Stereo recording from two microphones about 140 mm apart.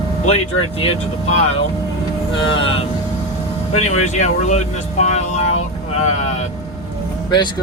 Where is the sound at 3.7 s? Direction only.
55° left (ahead or behind).